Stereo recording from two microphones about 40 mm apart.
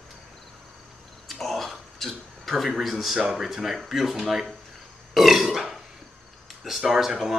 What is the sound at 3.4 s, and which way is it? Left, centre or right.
Speech, centre.